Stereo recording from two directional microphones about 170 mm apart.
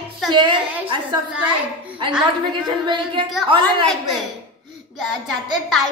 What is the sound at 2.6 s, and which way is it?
Speech, 30° right (ahead or behind).